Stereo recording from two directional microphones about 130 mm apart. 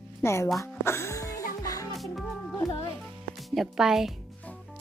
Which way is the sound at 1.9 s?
Centre (ahead or behind).